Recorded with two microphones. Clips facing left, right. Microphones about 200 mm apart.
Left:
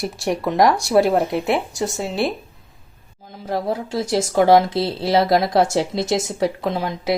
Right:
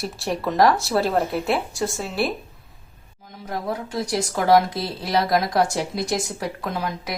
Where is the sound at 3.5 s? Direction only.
30° left (ahead or behind).